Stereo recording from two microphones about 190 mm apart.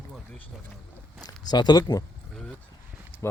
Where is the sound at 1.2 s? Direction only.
20° left (ahead or behind).